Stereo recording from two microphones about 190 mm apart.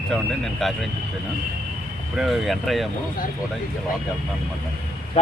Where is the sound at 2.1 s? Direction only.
Centre (ahead or behind).